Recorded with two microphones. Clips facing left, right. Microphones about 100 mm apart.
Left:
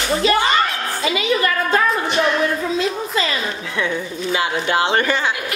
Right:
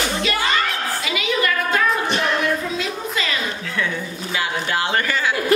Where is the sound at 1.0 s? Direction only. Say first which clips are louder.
Left 5 dB; 30° left (ahead or behind).